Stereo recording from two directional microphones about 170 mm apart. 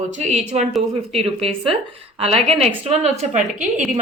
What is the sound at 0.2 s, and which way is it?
A woman's voice, 40° right (ahead or behind).